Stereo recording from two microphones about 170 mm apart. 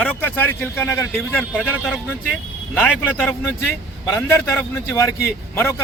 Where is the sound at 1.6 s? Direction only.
Centre (ahead or behind).